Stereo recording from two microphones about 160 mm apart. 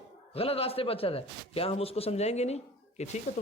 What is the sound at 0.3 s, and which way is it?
A man's voice, 35° left (ahead or behind).